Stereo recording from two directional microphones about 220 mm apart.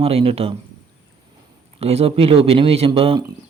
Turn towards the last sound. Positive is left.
turn(degrees=-25)  # may be behind; listen again after turning